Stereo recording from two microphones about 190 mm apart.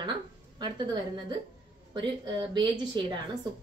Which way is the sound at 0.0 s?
25° right (ahead or behind).